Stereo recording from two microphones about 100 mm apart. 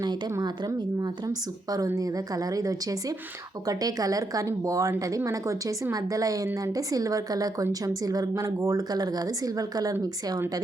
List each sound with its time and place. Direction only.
0.0 s speech: 40° right (ahead or behind)